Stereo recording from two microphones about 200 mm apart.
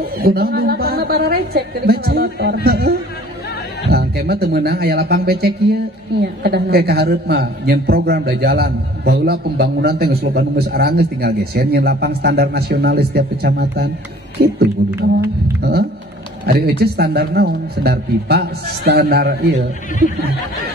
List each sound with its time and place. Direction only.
0.2 s a man's voice: 50° right (ahead or behind)
3.9 s a man's voice: 50° right (ahead or behind)
16.4 s a man's voice: 50° right (ahead or behind)